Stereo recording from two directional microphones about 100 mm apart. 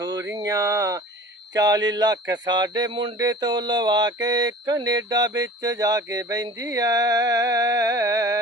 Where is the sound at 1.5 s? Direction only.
40° right (ahead or behind).